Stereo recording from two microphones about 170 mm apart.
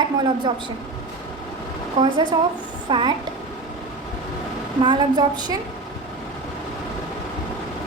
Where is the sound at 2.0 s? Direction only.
25° right (ahead or behind).